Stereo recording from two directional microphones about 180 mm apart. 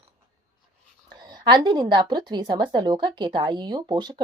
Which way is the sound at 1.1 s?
25° right (ahead or behind).